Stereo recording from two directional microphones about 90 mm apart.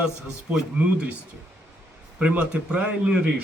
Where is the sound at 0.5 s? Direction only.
10° right (ahead or behind).